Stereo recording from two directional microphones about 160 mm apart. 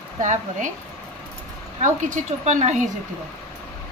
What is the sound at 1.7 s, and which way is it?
A woman's voice, 50° right (ahead or behind).